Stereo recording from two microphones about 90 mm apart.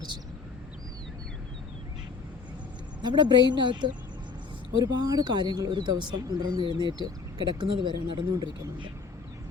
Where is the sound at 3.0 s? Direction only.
55° right (ahead or behind).